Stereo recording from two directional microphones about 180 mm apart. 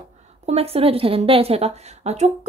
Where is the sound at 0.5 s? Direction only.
35° right (ahead or behind).